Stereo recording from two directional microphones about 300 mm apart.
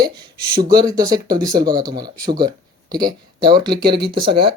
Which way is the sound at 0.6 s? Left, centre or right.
Right.